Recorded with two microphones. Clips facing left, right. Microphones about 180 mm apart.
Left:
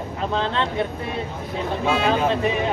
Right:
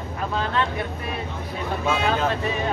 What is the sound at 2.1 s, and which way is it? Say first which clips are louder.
Speech: left 3 dB; 20° left (ahead or behind).